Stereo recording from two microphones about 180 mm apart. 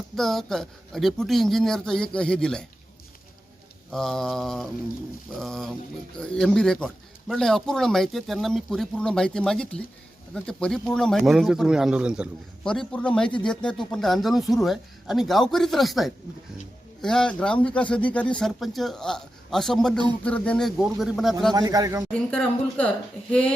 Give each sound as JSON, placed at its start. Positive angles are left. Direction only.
{"t": 0.2, "sound": "speech", "side_deg": 0}
{"t": 3.9, "sound": "speech", "side_deg": 5}
{"t": 21.5, "sound": "a man's voice", "side_deg": -20}
{"t": 22.1, "sound": "speech", "side_deg": 5}